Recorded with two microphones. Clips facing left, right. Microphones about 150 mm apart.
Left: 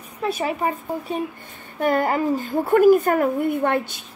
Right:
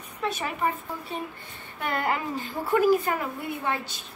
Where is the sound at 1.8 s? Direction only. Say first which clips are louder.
Left 8 dB; 40° left (ahead or behind).